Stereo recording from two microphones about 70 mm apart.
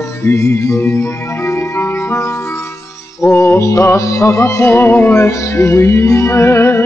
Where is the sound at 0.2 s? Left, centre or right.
Left.